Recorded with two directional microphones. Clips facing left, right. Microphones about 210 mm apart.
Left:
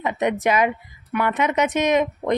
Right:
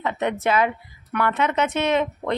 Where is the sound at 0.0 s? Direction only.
15° left (ahead or behind).